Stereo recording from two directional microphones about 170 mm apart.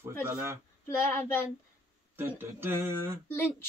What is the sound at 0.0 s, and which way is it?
Speech, 15° right (ahead or behind).